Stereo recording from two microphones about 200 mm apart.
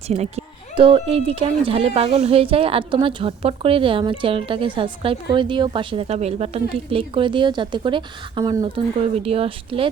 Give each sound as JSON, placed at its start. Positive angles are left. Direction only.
{"t": 0.1, "sound": "a woman's voice", "side_deg": -30}